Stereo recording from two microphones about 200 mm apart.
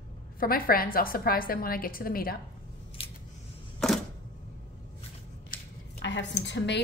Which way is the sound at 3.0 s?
30° left (ahead or behind).